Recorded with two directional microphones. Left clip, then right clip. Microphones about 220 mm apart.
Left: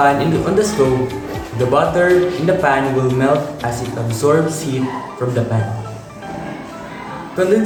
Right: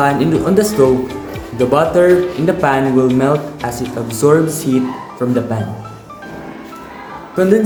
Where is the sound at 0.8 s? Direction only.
40° right (ahead or behind).